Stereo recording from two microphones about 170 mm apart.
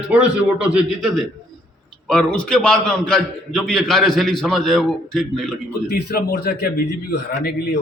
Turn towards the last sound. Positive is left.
turn(degrees=70)  # may be behind; listen again after turning